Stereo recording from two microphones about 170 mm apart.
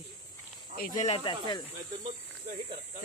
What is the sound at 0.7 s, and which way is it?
Speech, 60° left (ahead or behind).